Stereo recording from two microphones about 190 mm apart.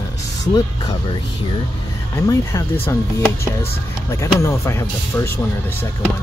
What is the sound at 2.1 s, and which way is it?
Speech, 15° left (ahead or behind).